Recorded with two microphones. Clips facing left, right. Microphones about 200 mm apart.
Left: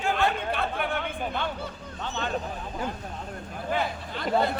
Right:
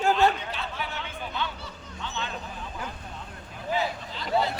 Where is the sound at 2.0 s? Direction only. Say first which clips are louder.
Left 3 dB; 45° left (ahead or behind).